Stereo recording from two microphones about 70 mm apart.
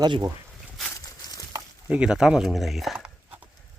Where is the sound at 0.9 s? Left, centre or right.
Left.